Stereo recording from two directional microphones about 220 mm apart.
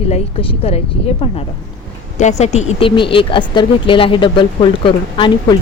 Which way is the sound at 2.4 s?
30° left (ahead or behind).